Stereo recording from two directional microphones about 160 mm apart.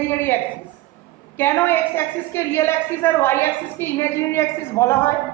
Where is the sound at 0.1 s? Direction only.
15° left (ahead or behind).